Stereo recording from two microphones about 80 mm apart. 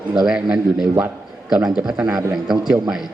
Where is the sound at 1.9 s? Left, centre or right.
Centre.